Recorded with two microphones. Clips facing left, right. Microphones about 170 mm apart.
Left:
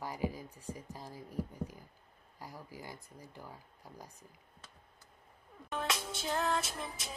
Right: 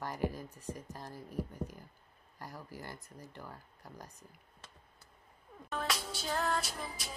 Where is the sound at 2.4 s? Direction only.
10° left (ahead or behind).